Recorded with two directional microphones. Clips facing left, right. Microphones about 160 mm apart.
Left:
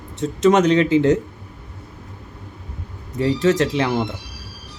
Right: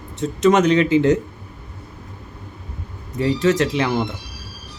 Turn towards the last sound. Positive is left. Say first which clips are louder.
# even
turn(degrees=30)  # may be behind; listen again after turning